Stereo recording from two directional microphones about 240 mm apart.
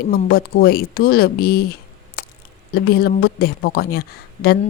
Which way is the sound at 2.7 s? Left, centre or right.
Left.